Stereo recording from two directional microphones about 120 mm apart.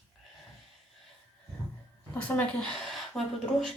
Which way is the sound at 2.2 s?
15° left (ahead or behind).